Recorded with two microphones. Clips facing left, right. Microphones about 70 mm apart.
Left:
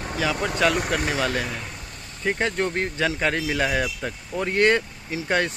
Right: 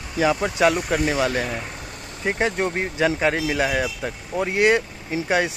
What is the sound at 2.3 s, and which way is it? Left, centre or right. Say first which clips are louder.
Speech: right 2 dB; centre.